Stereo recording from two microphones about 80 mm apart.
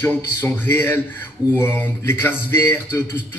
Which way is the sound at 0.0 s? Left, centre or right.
Left.